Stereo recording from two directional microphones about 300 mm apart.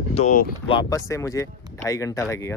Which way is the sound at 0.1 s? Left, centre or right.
Left.